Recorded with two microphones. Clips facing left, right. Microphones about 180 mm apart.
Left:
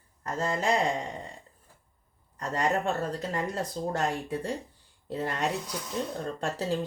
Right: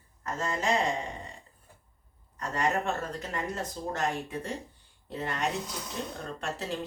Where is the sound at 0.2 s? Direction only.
35° left (ahead or behind).